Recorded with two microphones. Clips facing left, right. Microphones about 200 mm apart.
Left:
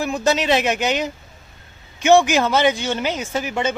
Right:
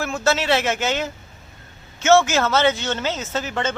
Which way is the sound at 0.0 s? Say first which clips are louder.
Left 2 dB; 15° left (ahead or behind).